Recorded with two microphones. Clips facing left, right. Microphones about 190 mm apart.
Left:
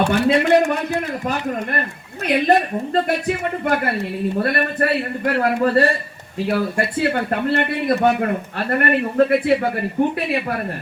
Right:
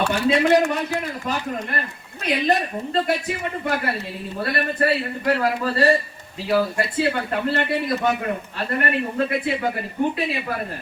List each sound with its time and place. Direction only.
0.1 s a man's voice: 55° left (ahead or behind)
2.2 s a man's voice: 55° left (ahead or behind)